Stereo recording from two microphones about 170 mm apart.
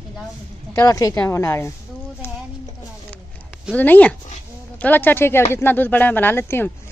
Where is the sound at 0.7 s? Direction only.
20° left (ahead or behind).